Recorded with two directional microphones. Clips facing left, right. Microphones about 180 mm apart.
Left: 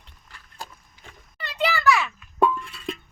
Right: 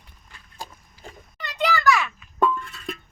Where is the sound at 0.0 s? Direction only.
15° right (ahead or behind).